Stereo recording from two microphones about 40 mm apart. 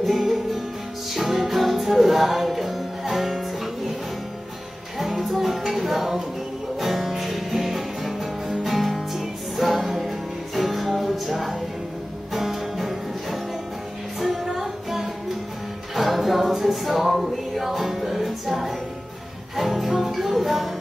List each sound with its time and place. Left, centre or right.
0.0 s music: centre
4.9 s music: centre